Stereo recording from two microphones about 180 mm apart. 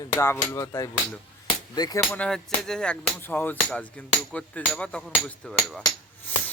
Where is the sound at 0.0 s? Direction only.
15° left (ahead or behind).